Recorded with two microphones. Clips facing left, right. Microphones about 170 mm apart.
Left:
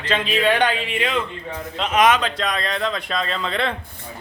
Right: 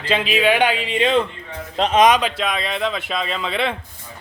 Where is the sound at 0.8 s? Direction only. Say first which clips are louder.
Right 5 dB; 25° right (ahead or behind).